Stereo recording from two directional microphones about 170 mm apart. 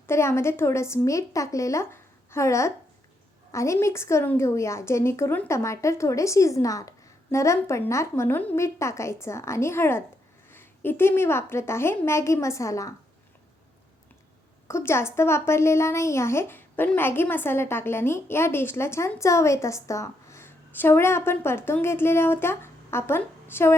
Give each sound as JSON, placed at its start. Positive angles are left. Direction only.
{"t": 0.1, "sound": "a woman's voice", "side_deg": 15}
{"t": 14.7, "sound": "a woman's voice", "side_deg": 15}